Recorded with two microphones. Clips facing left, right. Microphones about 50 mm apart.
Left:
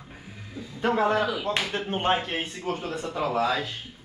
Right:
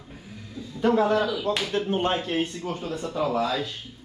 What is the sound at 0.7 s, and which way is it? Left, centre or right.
A man's voice, left.